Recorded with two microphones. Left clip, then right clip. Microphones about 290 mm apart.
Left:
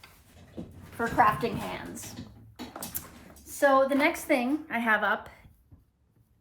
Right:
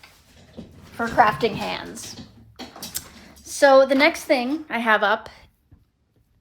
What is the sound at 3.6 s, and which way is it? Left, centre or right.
A woman's voice, right.